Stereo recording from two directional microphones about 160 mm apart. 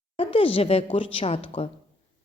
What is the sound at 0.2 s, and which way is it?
A woman's voice, 35° left (ahead or behind).